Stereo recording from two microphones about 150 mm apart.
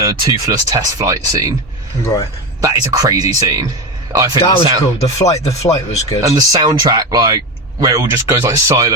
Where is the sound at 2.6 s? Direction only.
20° right (ahead or behind).